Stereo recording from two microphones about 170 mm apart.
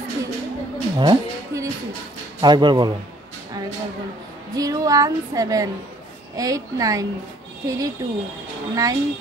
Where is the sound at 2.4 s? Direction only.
25° right (ahead or behind).